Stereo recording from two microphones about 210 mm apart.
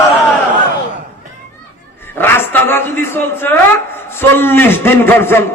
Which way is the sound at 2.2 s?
10° left (ahead or behind).